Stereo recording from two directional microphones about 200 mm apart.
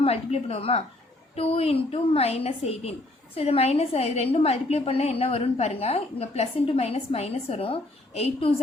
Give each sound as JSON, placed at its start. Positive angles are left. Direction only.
{"t": 0.0, "sound": "a woman's voice", "side_deg": 30}